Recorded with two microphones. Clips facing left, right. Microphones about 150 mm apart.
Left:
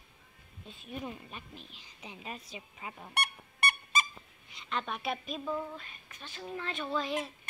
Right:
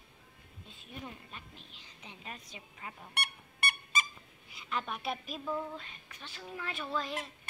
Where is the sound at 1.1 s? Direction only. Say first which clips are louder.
Left 5 dB; 15° left (ahead or behind).